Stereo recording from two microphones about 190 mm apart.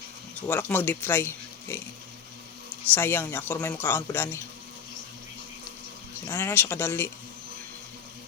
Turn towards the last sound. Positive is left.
turn(degrees=10)  # may be behind; listen again after turning